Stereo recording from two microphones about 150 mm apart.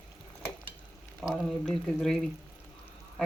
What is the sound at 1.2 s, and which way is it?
Speech, centre (ahead or behind).